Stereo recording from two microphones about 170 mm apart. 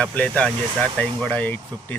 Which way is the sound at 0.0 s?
10° left (ahead or behind).